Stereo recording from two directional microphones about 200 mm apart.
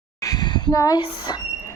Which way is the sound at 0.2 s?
20° left (ahead or behind).